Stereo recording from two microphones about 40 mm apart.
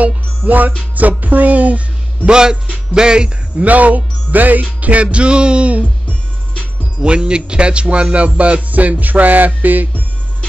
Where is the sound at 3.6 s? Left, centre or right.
Right.